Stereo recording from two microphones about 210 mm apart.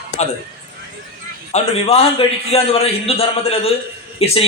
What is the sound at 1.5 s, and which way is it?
A man's voice, 30° left (ahead or behind).